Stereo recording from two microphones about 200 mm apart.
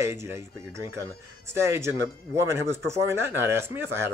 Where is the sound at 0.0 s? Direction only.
15° right (ahead or behind).